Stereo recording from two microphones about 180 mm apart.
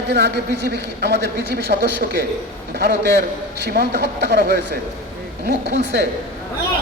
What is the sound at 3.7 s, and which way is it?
Speech, 65° right (ahead or behind).